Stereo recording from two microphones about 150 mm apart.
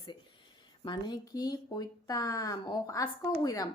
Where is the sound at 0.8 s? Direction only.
25° left (ahead or behind).